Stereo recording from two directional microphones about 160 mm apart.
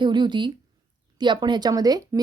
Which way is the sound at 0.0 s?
30° right (ahead or behind).